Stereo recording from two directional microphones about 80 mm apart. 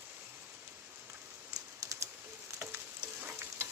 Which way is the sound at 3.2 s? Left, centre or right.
Right.